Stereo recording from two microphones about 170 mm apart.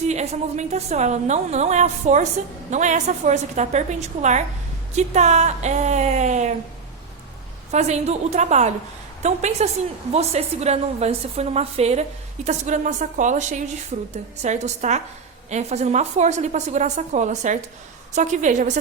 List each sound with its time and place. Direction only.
0.1 s a woman's voice: 40° right (ahead or behind)
7.7 s a woman's voice: 40° right (ahead or behind)